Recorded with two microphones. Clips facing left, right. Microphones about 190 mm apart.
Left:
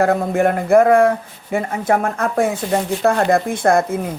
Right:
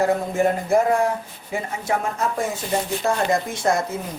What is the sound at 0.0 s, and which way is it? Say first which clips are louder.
Speech: left 4 dB; 60° left (ahead or behind).